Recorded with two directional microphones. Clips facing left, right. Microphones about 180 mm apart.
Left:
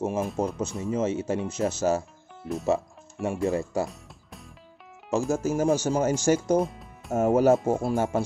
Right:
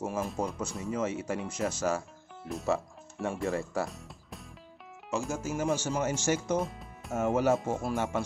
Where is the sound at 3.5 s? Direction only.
20° left (ahead or behind).